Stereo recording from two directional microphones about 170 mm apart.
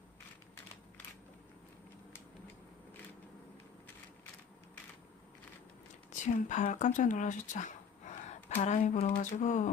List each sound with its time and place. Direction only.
6.1 s speech: 45° left (ahead or behind)